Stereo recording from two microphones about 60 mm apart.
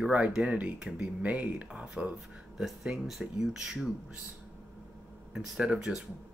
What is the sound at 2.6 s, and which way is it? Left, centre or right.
Speech, centre.